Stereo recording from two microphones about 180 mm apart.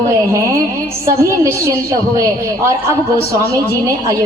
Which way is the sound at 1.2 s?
15° right (ahead or behind).